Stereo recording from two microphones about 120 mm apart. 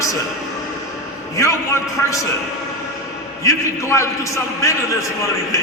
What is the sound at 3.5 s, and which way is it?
A man's voice, 25° left (ahead or behind).